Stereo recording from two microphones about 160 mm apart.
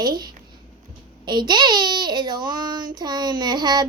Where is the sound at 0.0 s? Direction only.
25° right (ahead or behind).